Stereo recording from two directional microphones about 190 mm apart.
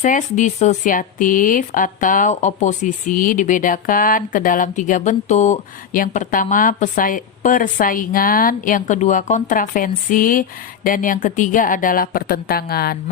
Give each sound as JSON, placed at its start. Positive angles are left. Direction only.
{"t": 0.0, "sound": "speech", "side_deg": 40}